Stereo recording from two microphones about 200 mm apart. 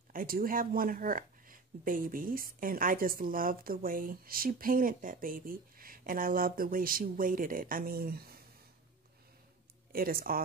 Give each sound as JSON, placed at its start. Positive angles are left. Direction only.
{"t": 0.1, "sound": "speech", "side_deg": -45}
{"t": 9.9, "sound": "speech", "side_deg": -45}